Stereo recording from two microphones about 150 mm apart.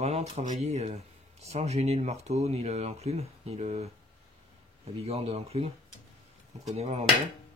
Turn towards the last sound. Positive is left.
turn(degrees=-45)  # may be behind; listen again after turning